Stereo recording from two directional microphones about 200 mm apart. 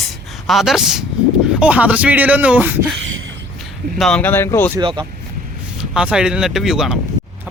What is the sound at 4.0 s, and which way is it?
Speech, 5° left (ahead or behind).